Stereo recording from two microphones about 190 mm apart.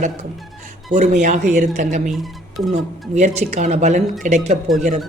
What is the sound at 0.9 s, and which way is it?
A woman's voice, 40° right (ahead or behind).